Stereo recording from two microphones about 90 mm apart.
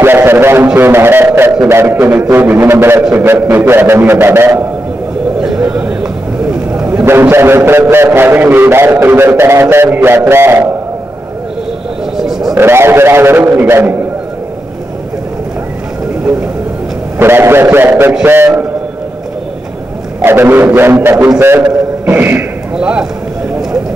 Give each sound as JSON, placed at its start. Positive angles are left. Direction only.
{"t": 0.0, "sound": "a sound", "side_deg": -25}
{"t": 0.7, "sound": "a man's voice", "side_deg": -25}
{"t": 5.4, "sound": "a man's voice", "side_deg": -10}
{"t": 7.1, "sound": "a man's voice", "side_deg": -25}
{"t": 12.2, "sound": "a sound", "side_deg": -5}
{"t": 12.5, "sound": "a man's voice", "side_deg": -25}
{"t": 17.2, "sound": "a man's voice", "side_deg": -25}
{"t": 20.2, "sound": "a man's voice", "side_deg": -25}